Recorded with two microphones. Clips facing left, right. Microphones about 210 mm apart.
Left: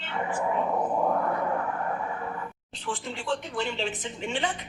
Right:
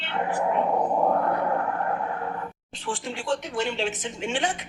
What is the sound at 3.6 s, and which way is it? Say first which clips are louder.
Speech: right 3 dB; 75° right (ahead or behind).